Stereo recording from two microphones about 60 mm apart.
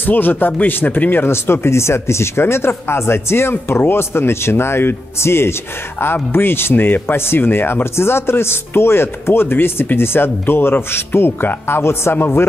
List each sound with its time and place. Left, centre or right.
0.0 s speech: left